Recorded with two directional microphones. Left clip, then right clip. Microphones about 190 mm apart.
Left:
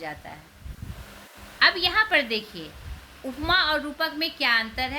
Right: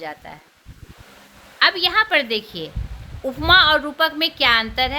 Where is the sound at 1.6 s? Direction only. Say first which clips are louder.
Right 4 dB; 50° right (ahead or behind).